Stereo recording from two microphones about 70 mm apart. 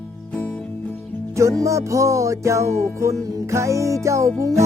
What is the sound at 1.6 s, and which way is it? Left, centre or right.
Music, right.